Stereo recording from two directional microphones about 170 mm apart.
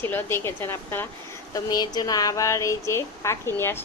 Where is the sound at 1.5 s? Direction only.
25° left (ahead or behind).